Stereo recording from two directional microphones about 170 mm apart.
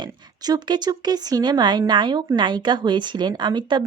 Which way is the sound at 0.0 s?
25° right (ahead or behind).